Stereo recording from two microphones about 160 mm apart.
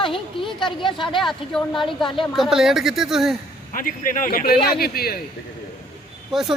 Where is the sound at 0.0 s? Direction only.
30° left (ahead or behind).